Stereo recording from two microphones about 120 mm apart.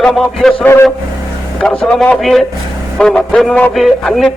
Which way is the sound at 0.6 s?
20° left (ahead or behind).